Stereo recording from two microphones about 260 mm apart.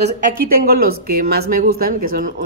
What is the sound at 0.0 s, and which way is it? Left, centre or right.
Speech, right.